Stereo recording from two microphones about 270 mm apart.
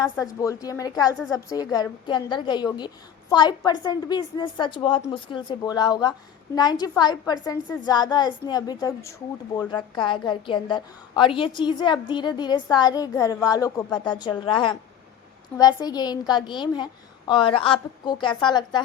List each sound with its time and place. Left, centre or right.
0.0 s a woman's voice: centre